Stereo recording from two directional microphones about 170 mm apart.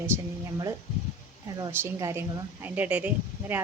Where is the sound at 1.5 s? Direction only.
20° right (ahead or behind).